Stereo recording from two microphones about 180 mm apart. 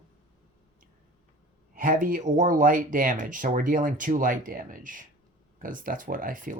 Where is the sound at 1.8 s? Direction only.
50° right (ahead or behind).